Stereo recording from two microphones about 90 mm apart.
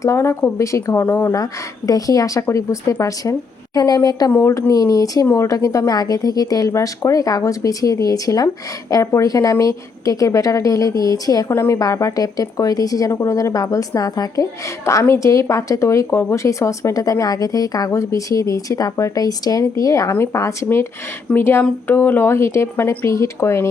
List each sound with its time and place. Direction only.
0.0 s a woman's voice: 30° left (ahead or behind)
1.0 s speech: 20° left (ahead or behind)
1.9 s a woman's voice: 40° left (ahead or behind)
4.3 s a woman's voice: 30° left (ahead or behind)
14.8 s a woman's voice: 30° left (ahead or behind)